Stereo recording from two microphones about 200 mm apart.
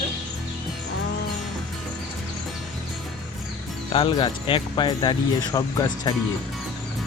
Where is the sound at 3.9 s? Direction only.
25° left (ahead or behind).